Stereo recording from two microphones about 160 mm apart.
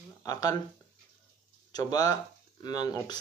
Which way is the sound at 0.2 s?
25° left (ahead or behind).